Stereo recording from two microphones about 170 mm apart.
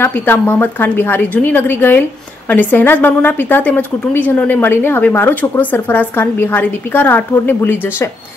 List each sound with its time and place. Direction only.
0.0 s a woman's voice: 10° left (ahead or behind)